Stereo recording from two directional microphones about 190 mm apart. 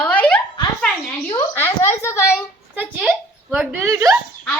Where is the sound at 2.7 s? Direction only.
5° right (ahead or behind).